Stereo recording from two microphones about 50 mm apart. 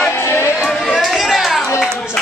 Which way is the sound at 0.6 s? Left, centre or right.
Centre.